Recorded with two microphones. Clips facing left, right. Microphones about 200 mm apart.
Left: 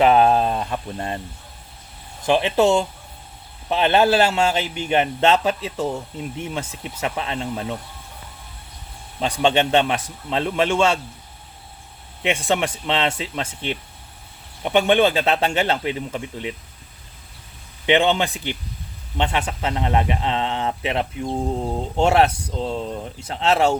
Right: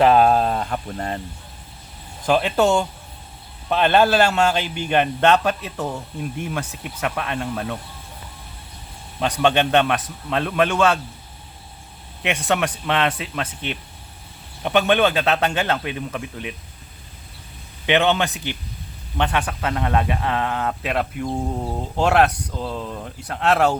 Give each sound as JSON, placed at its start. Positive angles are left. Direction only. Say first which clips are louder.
{"t": 0.0, "sound": "speech", "louder": "even", "side_deg": 20}
{"t": 2.2, "sound": "speech", "louder": "left 1 dB", "side_deg": 20}
{"t": 9.4, "sound": "speech", "louder": "even", "side_deg": 20}
{"t": 12.2, "sound": "speech", "louder": "left 1 dB", "side_deg": 25}
{"t": 17.8, "sound": "speech", "louder": "left 1 dB", "side_deg": 20}